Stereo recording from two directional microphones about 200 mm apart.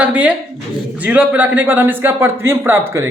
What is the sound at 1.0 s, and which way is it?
A man's voice, 5° right (ahead or behind).